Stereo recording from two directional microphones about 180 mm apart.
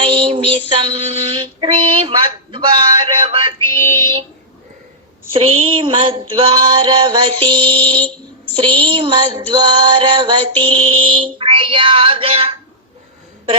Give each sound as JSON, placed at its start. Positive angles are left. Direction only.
{"t": 0.0, "sound": "child singing", "side_deg": -30}
{"t": 0.7, "sound": "music", "side_deg": -25}
{"t": 5.3, "sound": "music", "side_deg": -30}
{"t": 8.0, "sound": "child singing", "side_deg": 5}
{"t": 8.5, "sound": "music", "side_deg": -25}